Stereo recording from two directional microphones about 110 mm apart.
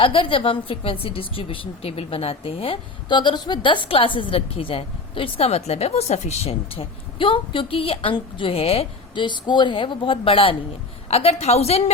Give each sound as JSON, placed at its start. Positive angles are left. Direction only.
{"t": 0.0, "sound": "a woman's voice", "side_deg": 55}
{"t": 3.1, "sound": "a woman's voice", "side_deg": 45}
{"t": 11.1, "sound": "a woman's voice", "side_deg": 65}